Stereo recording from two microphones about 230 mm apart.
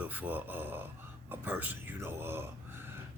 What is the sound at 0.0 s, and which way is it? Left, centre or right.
Speech, centre.